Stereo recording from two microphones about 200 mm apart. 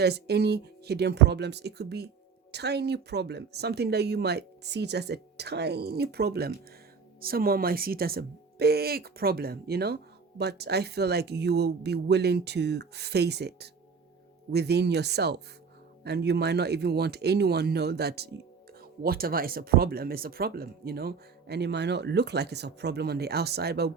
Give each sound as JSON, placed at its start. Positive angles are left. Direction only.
{"t": 0.0, "sound": "speech", "side_deg": -55}